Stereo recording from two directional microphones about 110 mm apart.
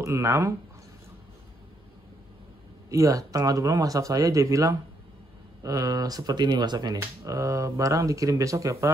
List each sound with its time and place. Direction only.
0.0 s speech: 25° right (ahead or behind)
2.9 s speech: 30° right (ahead or behind)
7.0 s speech: 30° right (ahead or behind)